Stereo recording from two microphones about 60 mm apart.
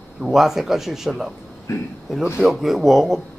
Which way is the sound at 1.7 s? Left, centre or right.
Left.